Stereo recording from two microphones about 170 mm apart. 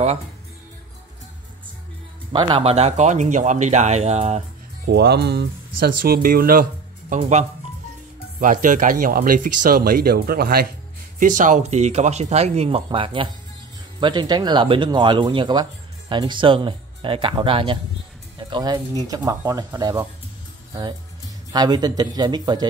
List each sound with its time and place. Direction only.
2.3 s speech: 30° right (ahead or behind)
4.8 s speech: 75° right (ahead or behind); by 7.2 s 55° right (ahead or behind)
7.2 s speech: 40° right (ahead or behind)
8.4 s speech: 50° right (ahead or behind)
11.1 s speech: 50° right (ahead or behind); by 20.1 s 20° right (ahead or behind)
21.5 s speech: 25° right (ahead or behind)